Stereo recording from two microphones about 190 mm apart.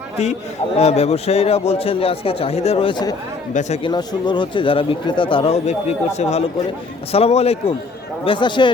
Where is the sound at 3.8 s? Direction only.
25° left (ahead or behind).